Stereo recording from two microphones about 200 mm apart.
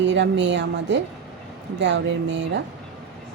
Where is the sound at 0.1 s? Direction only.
65° right (ahead or behind).